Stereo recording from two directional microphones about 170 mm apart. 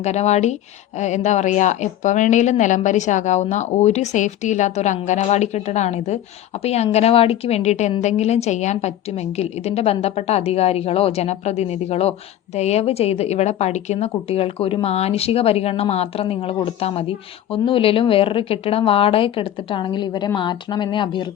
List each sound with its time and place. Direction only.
0.0 s a woman's voice: 40° left (ahead or behind)